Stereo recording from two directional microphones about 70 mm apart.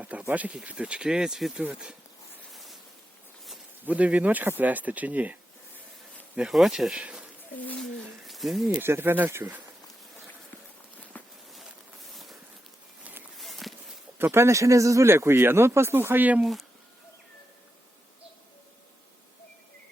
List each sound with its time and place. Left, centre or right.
0.0 s speech: right
2.5 s a sound: centre
3.8 s speech: centre
6.5 s speech: centre
7.0 s bird: centre
8.3 s speech: centre
8.8 s speech: right
11.1 s walk: left
12.1 s a sound: centre
13.4 s walk: centre
14.2 s speech: right
16.4 s speech: centre